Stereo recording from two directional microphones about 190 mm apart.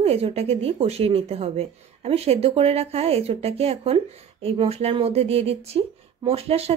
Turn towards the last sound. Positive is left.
turn(degrees=-30)  # may be behind; listen again after turning